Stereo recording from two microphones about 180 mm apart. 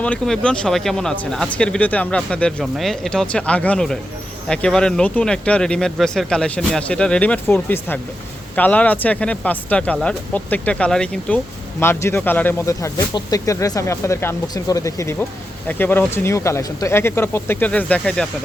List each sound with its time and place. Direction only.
0.0 s speech: 5° left (ahead or behind)